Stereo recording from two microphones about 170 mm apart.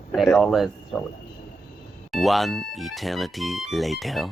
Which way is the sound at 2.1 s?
Centre (ahead or behind).